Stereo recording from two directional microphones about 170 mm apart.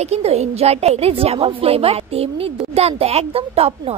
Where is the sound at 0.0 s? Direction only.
40° right (ahead or behind).